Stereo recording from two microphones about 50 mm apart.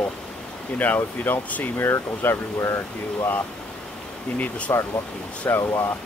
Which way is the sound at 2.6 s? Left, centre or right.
Left.